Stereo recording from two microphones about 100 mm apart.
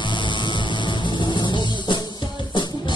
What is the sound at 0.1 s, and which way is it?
Music, 50° left (ahead or behind).